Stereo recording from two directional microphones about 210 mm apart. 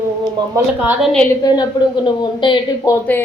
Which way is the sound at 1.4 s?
20° left (ahead or behind).